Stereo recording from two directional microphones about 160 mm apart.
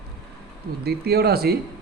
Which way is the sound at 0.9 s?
80° right.